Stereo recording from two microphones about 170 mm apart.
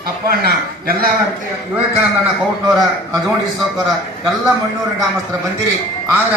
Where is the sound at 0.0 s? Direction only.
60° right (ahead or behind).